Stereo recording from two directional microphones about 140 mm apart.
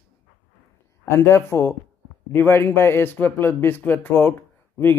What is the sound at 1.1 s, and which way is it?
A man's voice, 20° left (ahead or behind).